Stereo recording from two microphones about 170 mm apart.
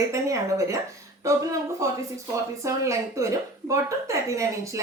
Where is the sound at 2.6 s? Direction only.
15° right (ahead or behind).